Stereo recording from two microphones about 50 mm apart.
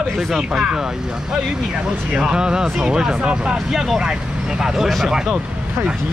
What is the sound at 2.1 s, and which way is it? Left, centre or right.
Speech, centre.